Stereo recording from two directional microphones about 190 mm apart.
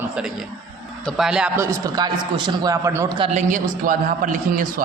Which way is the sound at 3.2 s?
35° right (ahead or behind).